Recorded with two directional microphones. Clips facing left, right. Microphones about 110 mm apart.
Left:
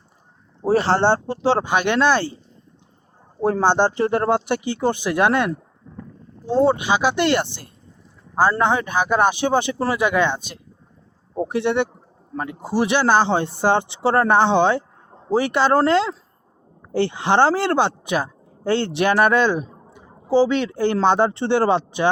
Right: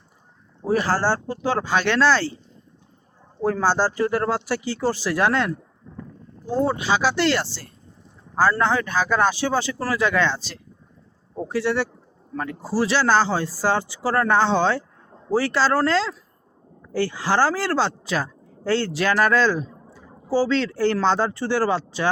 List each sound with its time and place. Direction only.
0.6 s a woman's voice: 30° left (ahead or behind)
3.4 s a woman's voice: 25° left (ahead or behind)